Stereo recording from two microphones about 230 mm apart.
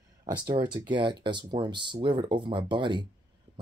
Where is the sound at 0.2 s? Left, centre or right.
Centre.